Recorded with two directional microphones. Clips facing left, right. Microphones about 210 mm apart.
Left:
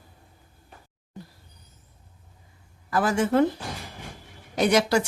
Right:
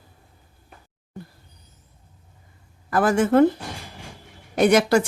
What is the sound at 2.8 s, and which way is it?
Speech, 50° right (ahead or behind).